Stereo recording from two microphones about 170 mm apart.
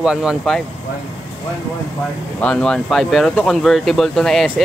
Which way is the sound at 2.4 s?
5° left (ahead or behind).